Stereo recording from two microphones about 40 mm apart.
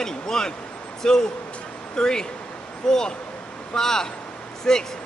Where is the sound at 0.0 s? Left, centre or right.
Centre.